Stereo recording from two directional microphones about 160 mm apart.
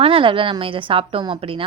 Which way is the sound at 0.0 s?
35° right (ahead or behind).